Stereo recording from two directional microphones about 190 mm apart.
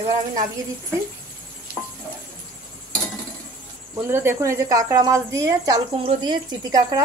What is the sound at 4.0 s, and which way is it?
A woman's voice, 10° right (ahead or behind).